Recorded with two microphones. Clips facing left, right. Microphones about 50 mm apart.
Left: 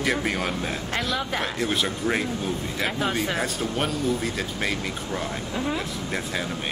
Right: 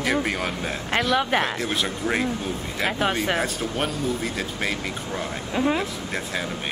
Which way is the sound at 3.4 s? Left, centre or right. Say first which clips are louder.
Even; centre.